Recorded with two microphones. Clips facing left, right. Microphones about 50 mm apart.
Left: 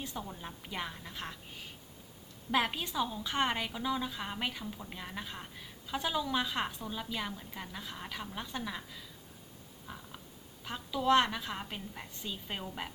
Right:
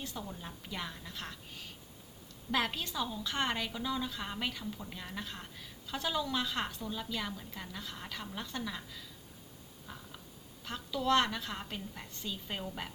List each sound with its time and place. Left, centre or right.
0.0 s a woman's voice: left
2.5 s a woman's voice: centre
9.8 s a sound: centre
10.6 s a woman's voice: centre